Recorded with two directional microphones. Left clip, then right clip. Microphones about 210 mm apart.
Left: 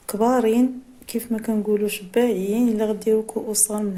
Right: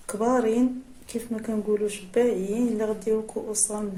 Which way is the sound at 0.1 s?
40° left (ahead or behind).